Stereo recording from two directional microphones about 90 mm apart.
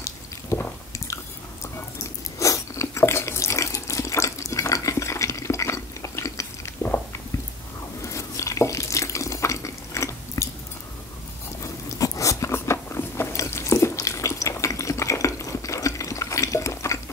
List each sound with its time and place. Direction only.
0.0 s drip: 30° left (ahead or behind)
1.0 s biting: 35° left (ahead or behind)
2.3 s water: 35° left (ahead or behind)
8.0 s water tap: 35° left (ahead or behind)
12.0 s biting: 40° left (ahead or behind)